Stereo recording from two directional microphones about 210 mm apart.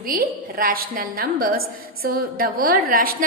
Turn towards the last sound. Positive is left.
turn(degrees=-40)  # may be behind; listen again after turning